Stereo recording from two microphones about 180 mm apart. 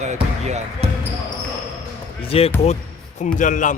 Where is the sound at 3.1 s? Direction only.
45° left (ahead or behind).